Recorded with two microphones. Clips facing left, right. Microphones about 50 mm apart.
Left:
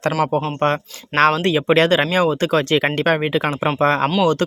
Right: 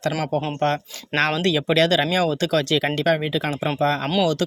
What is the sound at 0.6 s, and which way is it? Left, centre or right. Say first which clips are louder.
Speech: left 3 dB; left.